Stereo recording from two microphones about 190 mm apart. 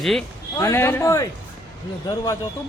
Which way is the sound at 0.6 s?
15° left (ahead or behind).